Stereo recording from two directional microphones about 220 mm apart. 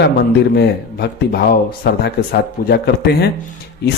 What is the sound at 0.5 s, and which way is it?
Speech, 45° left (ahead or behind).